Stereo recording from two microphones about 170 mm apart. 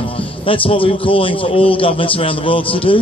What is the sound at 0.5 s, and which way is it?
A man's voice, 30° left (ahead or behind).